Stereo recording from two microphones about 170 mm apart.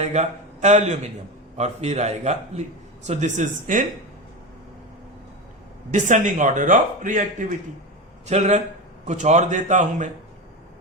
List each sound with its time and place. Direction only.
0.0 s a man's voice: 40° right (ahead or behind)
5.9 s a man's voice: 45° right (ahead or behind)